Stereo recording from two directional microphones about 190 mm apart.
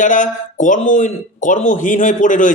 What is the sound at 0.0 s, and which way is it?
Speech, 45° left (ahead or behind).